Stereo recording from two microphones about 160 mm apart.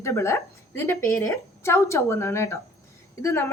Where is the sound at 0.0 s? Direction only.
15° left (ahead or behind).